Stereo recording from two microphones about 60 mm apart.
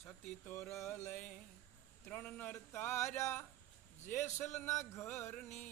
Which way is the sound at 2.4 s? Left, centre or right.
Left.